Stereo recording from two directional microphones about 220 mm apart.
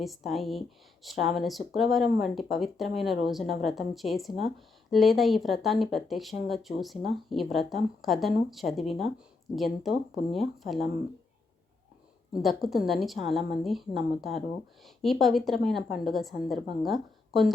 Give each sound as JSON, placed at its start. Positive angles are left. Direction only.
{"t": 0.0, "sound": "speech", "side_deg": 0}
{"t": 12.4, "sound": "a woman's voice", "side_deg": 0}